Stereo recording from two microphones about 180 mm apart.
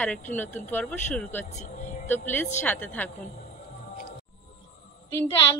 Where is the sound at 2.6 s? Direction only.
10° left (ahead or behind).